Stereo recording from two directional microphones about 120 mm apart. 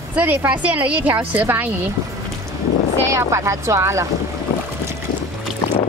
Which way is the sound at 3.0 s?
25° right (ahead or behind).